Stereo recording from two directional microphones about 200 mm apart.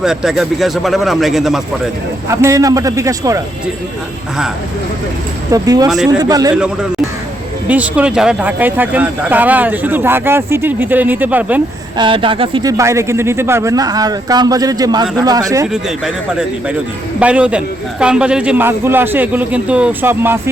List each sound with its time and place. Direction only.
0.0 s speech: 5° right (ahead or behind)
2.3 s speech: 15° right (ahead or behind)
5.5 s speech: 20° right (ahead or behind)
7.7 s speech: 5° right (ahead or behind)
11.9 s speech: 25° right (ahead or behind)
15.6 s speech: 5° right (ahead or behind)